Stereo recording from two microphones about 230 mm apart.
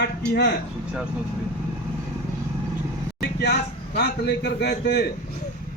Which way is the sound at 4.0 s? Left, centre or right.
Left.